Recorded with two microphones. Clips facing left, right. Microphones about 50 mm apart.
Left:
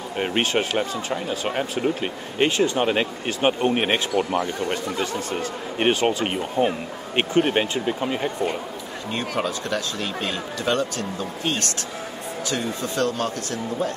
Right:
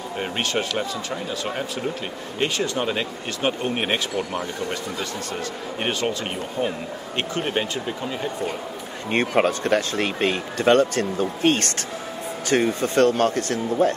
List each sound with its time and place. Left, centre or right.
0.2 s speech: left
5.3 s speech: left
9.1 s speech: right